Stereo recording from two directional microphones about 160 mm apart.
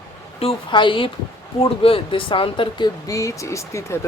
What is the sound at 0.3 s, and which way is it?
Speech, 35° left (ahead or behind).